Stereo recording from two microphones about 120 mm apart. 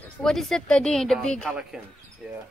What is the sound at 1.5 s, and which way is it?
Speech, 10° right (ahead or behind).